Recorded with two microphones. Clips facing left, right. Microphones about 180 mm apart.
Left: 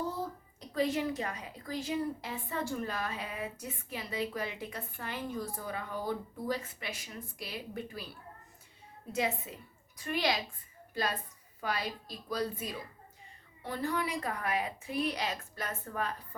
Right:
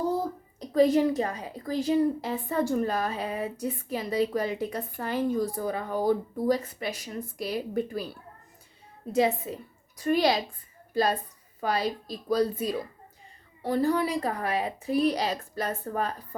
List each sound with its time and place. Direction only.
0.7 s a woman's voice: 40° right (ahead or behind)
9.5 s a woman's voice: 40° right (ahead or behind)